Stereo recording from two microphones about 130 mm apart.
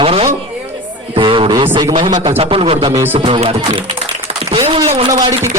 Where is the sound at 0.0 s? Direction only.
50° right (ahead or behind).